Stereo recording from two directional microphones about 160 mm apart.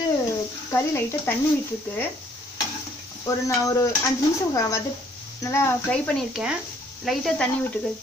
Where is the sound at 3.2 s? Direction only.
20° left (ahead or behind).